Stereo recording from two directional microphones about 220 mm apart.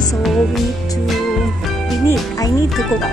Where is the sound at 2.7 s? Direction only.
Centre (ahead or behind).